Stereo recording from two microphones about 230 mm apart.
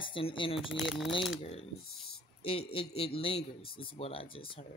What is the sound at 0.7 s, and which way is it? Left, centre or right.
Speech, centre.